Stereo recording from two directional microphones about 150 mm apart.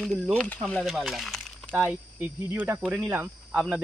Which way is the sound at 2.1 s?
10° right (ahead or behind).